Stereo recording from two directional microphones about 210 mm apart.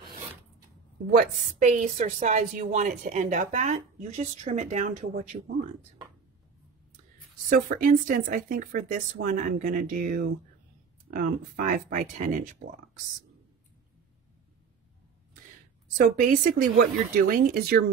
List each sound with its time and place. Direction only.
1.1 s speech: 35° right (ahead or behind)
7.4 s speech: 40° right (ahead or behind)
16.0 s speech: 40° right (ahead or behind)